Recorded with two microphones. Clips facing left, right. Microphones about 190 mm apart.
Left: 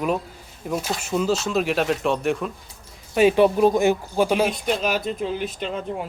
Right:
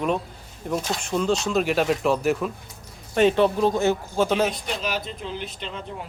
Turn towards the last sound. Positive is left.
turn(degrees=45)  # may be behind; listen again after turning